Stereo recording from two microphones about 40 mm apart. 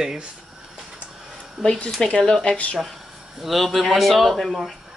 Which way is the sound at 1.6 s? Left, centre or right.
Centre.